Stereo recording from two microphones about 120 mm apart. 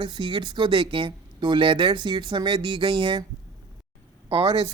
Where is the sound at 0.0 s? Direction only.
40° right (ahead or behind).